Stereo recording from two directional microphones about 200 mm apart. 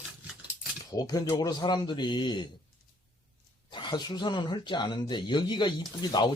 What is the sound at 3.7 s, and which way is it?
Speech, 20° left (ahead or behind).